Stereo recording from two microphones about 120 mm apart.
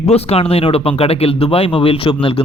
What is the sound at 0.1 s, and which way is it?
Speech, 55° left (ahead or behind).